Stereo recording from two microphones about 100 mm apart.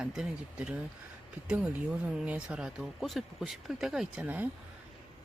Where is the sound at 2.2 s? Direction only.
10° right (ahead or behind).